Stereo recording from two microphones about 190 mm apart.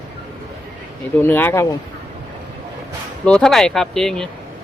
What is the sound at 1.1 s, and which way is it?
Speech, 10° left (ahead or behind).